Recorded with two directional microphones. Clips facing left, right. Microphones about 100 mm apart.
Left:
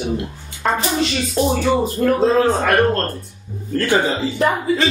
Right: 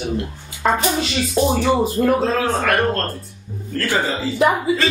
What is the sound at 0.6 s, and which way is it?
Speech, centre (ahead or behind).